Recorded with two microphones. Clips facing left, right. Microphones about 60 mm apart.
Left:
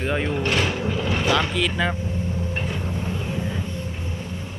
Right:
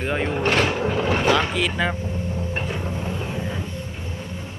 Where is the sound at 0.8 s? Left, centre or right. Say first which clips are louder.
Right 3 dB; right.